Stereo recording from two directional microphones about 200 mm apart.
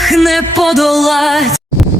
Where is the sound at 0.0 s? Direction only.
Centre (ahead or behind).